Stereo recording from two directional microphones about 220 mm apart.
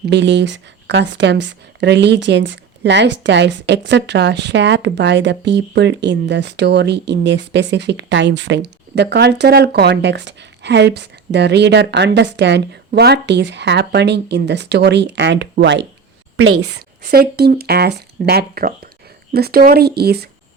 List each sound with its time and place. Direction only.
0.1 s speech: 50° right (ahead or behind)
17.0 s speech: 45° right (ahead or behind)